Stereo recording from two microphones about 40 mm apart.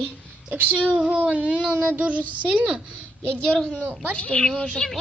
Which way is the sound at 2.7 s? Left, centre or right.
Right.